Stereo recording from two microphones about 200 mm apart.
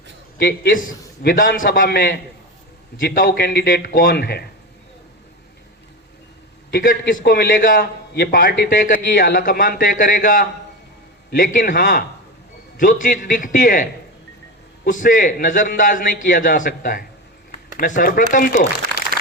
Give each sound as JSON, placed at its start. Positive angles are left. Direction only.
{"t": 0.3, "sound": "a man's voice", "side_deg": 50}
{"t": 6.7, "sound": "a man's voice", "side_deg": 50}
{"t": 14.8, "sound": "a man's voice", "side_deg": 40}